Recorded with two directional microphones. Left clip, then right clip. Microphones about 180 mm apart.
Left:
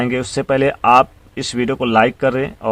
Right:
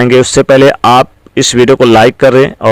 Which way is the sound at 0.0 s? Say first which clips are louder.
Right 14 dB; 40° right (ahead or behind).